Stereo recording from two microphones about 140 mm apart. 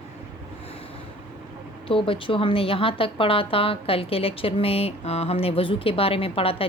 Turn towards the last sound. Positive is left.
turn(degrees=45)  # may be behind; listen again after turning